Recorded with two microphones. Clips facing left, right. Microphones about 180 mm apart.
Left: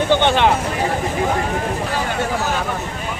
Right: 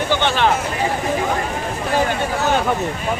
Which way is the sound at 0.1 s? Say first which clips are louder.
Left 3 dB; 20° left (ahead or behind).